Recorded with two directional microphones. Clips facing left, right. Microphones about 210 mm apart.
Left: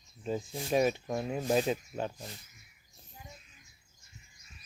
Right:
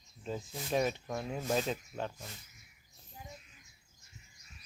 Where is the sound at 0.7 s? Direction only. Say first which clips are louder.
Left 4 dB; 10° left (ahead or behind).